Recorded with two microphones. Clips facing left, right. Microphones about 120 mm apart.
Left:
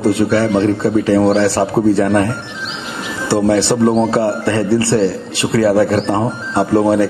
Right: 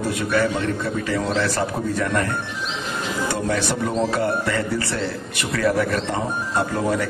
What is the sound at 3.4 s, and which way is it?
A man's voice, 30° left (ahead or behind).